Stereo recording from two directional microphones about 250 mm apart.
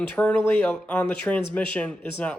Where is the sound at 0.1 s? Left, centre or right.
Centre.